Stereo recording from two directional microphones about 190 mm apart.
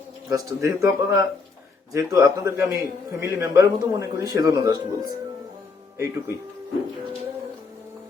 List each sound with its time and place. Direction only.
0.3 s a man's voice: 15° right (ahead or behind)